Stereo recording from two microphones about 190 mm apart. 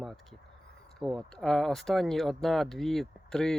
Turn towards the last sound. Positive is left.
turn(degrees=5)  # may be behind; listen again after turning